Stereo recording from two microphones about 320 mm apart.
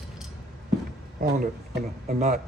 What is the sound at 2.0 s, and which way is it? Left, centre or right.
Speech, right.